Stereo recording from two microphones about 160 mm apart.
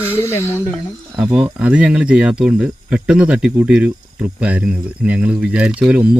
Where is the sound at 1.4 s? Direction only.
5° right (ahead or behind).